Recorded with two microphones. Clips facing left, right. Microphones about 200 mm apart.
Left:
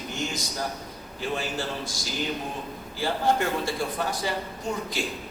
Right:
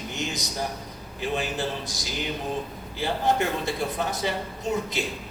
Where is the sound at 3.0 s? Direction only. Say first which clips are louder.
Even; 20° right (ahead or behind).